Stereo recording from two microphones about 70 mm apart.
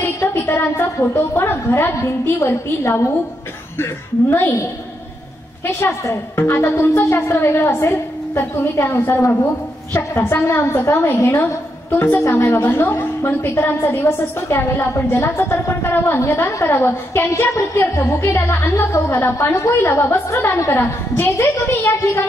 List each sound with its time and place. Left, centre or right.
0.2 s a woman's voice: left
5.8 s a woman's voice: left